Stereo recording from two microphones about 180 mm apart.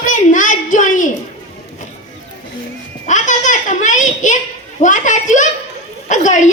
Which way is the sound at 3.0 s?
45° left (ahead or behind).